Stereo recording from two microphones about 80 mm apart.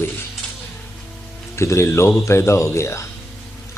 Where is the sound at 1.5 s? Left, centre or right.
Left.